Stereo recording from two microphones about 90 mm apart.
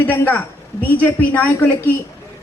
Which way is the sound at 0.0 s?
20° left (ahead or behind).